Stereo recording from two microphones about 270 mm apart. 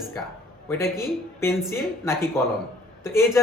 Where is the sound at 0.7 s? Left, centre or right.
Centre.